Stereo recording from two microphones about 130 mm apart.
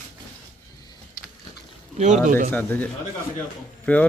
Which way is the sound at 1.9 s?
65° right (ahead or behind).